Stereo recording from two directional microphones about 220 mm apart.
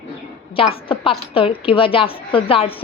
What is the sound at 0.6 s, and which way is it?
A woman's voice, 25° left (ahead or behind).